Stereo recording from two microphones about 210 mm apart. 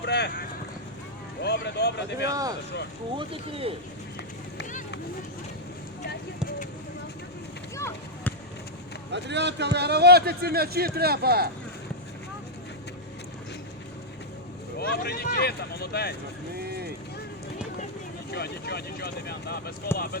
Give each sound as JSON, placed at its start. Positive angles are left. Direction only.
{"t": 0.0, "sound": "vehicle", "side_deg": 50}
{"t": 1.4, "sound": "a sound", "side_deg": 50}
{"t": 2.3, "sound": "speech", "side_deg": -15}
{"t": 7.8, "sound": "a sound", "side_deg": 10}
{"t": 9.1, "sound": "a man's voice", "side_deg": -55}
{"t": 14.8, "sound": "speech", "side_deg": 50}
{"t": 16.6, "sound": "a man's voice", "side_deg": -50}
{"t": 18.3, "sound": "speech", "side_deg": 50}